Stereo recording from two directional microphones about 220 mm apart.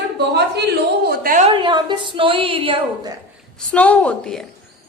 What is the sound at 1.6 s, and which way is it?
A woman's voice, 20° right (ahead or behind).